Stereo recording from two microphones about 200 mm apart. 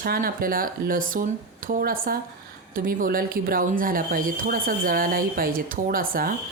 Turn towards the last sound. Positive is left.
turn(degrees=-45)  # may be behind; listen again after turning